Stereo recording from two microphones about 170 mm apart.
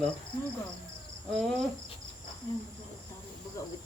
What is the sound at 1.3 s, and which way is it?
Cricket, 5° left (ahead or behind).